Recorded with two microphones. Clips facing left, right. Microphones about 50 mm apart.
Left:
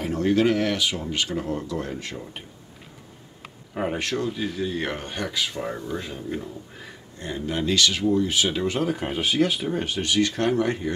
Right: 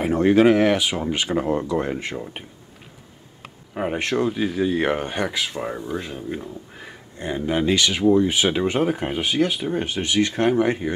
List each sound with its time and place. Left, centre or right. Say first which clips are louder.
0.0 s speech: right 5 dB; right
3.4 s a sound: right 1 dB; centre
4.2 s speech: right 5 dB; centre